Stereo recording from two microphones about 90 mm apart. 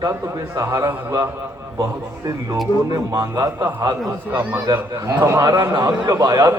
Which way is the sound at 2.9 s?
40° right (ahead or behind).